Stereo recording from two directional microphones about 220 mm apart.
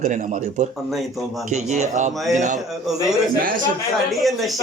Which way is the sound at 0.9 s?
Centre (ahead or behind).